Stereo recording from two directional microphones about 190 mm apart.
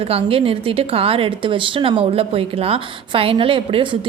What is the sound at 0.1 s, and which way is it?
A woman's voice, 30° right (ahead or behind).